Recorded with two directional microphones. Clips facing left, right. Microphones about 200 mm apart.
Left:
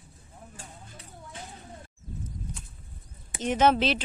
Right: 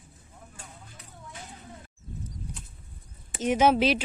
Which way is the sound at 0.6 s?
30° left (ahead or behind).